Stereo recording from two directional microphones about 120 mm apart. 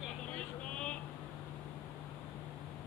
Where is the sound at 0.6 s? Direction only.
10° left (ahead or behind).